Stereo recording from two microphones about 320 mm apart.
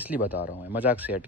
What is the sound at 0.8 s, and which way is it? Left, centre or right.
Speech, centre.